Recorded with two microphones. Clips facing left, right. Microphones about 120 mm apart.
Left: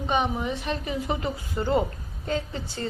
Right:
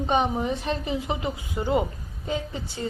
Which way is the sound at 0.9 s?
20° right (ahead or behind).